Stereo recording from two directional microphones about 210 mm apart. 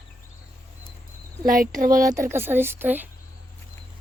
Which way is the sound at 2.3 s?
10° right (ahead or behind).